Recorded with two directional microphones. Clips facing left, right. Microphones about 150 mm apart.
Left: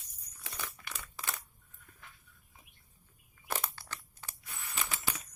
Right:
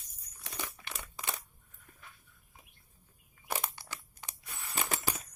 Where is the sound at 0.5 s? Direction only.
20° right (ahead or behind).